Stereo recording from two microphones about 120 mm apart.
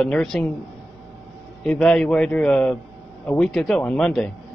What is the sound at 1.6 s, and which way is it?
Speech, 5° left (ahead or behind).